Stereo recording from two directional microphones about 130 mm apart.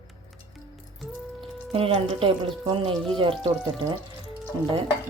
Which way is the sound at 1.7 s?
45° right (ahead or behind).